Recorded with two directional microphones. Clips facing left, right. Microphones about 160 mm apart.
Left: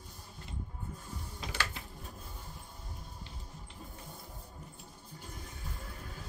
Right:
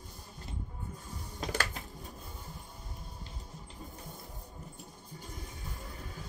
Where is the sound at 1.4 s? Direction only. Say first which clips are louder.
Right 5 dB; 45° right (ahead or behind).